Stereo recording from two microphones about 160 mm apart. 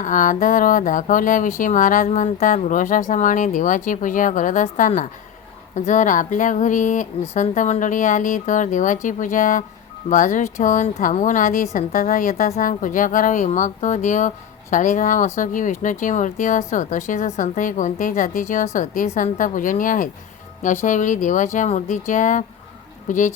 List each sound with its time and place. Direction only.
0.0 s a woman's voice: 55° left (ahead or behind)